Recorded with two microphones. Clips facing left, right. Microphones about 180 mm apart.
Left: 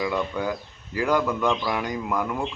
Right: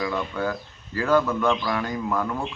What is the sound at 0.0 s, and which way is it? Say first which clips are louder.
A man's voice: left 1 dB; 15° left (ahead or behind).